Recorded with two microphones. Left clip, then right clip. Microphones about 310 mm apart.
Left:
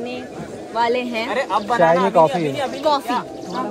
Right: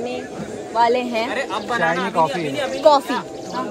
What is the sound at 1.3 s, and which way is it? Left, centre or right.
Speech, left.